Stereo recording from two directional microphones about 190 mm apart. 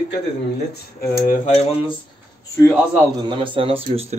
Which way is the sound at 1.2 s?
40° left (ahead or behind).